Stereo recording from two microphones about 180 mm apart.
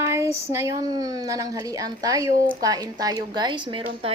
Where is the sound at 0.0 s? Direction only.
15° right (ahead or behind).